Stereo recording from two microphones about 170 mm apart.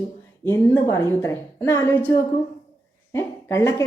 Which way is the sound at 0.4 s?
15° left (ahead or behind).